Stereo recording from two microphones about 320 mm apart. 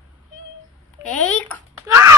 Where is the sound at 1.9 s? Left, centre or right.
Centre.